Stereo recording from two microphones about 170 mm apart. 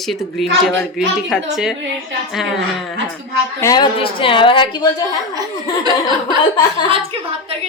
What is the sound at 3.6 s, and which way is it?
A woman's voice, 20° left (ahead or behind).